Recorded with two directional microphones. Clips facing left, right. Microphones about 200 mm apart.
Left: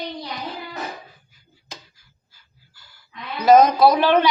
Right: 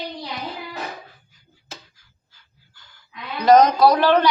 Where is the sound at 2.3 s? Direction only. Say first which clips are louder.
Right 1 dB; 10° left (ahead or behind).